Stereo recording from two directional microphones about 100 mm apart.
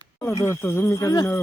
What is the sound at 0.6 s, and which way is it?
Speech, 20° left (ahead or behind).